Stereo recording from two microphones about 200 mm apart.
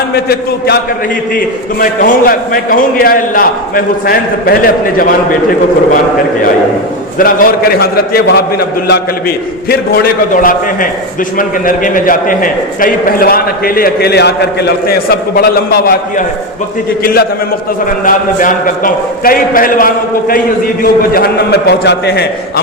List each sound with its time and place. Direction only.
0.1 s a man's voice: 50° left (ahead or behind)
1.8 s a man's voice: 45° left (ahead or behind)
7.2 s a man's voice: 45° left (ahead or behind)